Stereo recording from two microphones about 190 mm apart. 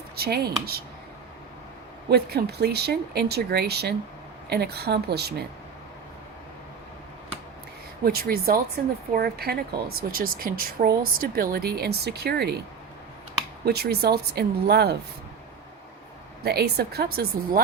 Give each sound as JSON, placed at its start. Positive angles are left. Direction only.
{"t": 0.2, "sound": "speech", "side_deg": -55}
{"t": 2.0, "sound": "speech", "side_deg": -60}
{"t": 8.0, "sound": "speech", "side_deg": -55}
{"t": 13.7, "sound": "speech", "side_deg": -55}
{"t": 16.4, "sound": "speech", "side_deg": -60}